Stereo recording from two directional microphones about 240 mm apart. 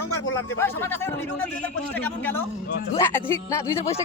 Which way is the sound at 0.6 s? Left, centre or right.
Centre.